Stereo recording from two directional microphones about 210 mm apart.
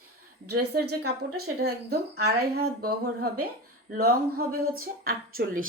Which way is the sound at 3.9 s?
45° right (ahead or behind).